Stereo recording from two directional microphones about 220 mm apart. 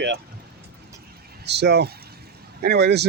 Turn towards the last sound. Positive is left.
turn(degrees=-50)  # may be behind; listen again after turning